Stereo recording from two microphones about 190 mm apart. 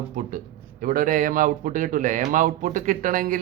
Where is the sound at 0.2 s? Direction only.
45° right (ahead or behind).